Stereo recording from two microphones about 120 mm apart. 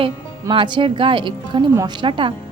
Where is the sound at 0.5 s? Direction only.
45° right (ahead or behind).